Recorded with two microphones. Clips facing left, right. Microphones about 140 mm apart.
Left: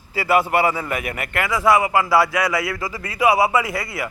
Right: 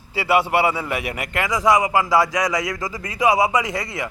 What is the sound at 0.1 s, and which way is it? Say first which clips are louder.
A man's voice: even; 5° right (ahead or behind).